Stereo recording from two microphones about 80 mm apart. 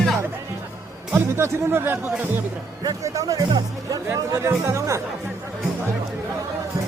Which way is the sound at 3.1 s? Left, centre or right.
Right.